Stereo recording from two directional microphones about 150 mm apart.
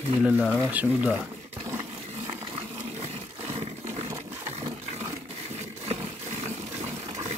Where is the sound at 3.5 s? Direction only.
45° right (ahead or behind).